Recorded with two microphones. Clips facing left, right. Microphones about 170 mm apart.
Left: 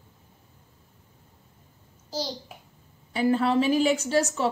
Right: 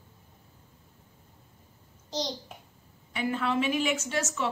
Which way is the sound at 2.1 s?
5° left (ahead or behind).